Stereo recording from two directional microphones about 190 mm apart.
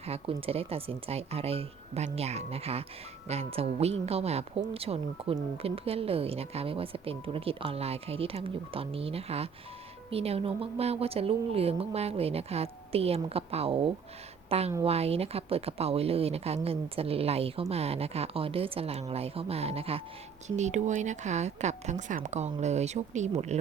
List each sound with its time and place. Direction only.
0.0 s a woman's voice: 30° right (ahead or behind)